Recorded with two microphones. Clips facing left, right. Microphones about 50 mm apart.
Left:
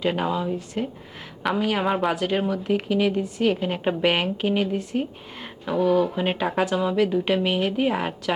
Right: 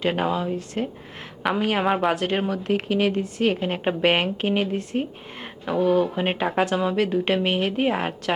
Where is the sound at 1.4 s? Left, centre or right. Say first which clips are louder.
Right 1 dB; centre.